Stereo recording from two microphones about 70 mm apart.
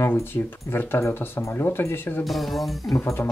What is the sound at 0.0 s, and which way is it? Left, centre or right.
Speech, left.